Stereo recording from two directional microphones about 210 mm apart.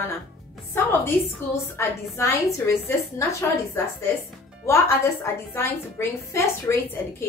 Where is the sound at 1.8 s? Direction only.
10° left (ahead or behind).